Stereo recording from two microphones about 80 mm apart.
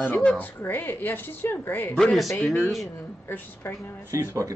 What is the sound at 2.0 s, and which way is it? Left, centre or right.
Speech, centre.